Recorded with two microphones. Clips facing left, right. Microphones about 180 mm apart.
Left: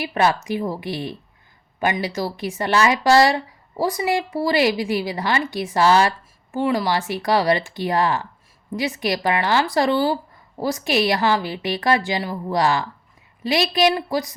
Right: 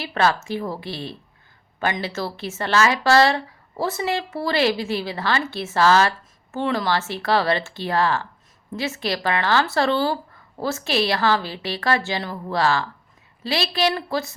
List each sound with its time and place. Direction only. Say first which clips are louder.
0.0 s speech: left 1 dB; 15° left (ahead or behind)